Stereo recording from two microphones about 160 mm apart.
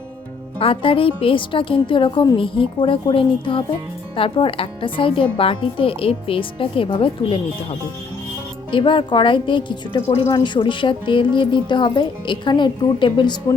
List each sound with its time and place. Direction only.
0.6 s a woman's voice: 35° left (ahead or behind)